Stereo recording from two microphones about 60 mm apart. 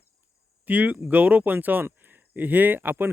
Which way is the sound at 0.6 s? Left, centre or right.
Right.